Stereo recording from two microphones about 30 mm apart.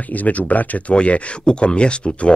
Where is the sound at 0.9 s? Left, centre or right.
Left.